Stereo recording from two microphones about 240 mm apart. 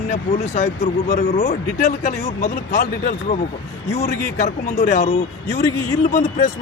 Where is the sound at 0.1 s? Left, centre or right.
Left.